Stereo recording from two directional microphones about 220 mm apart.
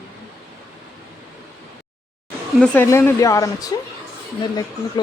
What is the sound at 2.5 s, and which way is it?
A woman's voice, 5° left (ahead or behind).